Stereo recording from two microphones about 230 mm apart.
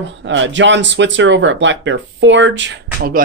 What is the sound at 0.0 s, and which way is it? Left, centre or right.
A man's voice, right.